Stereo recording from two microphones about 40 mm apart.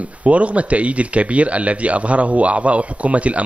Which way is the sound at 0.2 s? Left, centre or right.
Right.